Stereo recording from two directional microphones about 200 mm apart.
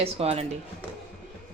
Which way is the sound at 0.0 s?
30° right (ahead or behind).